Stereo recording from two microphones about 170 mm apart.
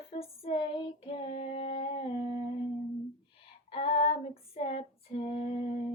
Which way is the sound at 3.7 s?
35° left (ahead or behind).